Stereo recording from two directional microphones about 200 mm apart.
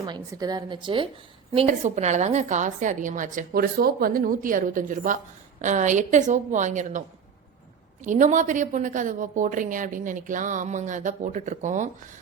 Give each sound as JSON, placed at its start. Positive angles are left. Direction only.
{"t": 0.0, "sound": "a woman's voice", "side_deg": -20}
{"t": 1.5, "sound": "a woman's voice", "side_deg": -35}
{"t": 8.0, "sound": "a woman's voice", "side_deg": -40}